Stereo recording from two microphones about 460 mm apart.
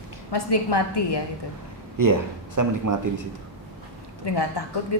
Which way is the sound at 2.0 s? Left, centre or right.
Right.